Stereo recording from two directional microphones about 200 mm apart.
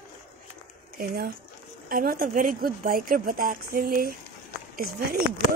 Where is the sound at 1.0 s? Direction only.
50° right (ahead or behind).